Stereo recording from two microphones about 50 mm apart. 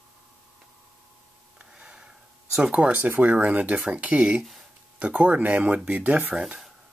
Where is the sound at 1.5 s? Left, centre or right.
Centre.